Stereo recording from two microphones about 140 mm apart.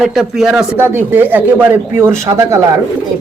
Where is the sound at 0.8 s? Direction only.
15° right (ahead or behind).